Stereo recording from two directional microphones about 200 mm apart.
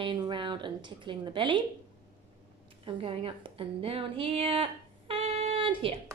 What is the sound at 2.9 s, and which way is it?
A woman's voice, 30° right (ahead or behind).